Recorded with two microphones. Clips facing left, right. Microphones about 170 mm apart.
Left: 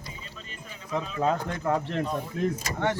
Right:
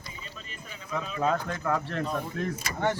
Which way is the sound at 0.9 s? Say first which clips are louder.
Left 1 dB; 25° left (ahead or behind).